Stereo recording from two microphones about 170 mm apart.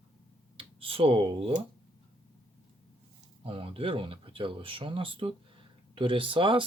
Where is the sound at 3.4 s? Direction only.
35° right (ahead or behind).